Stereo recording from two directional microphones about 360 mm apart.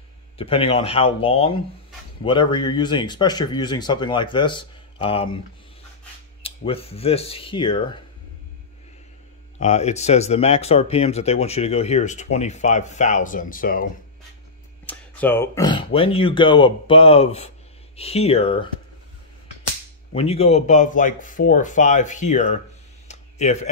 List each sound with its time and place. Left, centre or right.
0.4 s speech: centre
6.4 s speech: centre
9.6 s speech: centre
14.9 s speech: centre
20.1 s speech: centre
23.0 s a sound: centre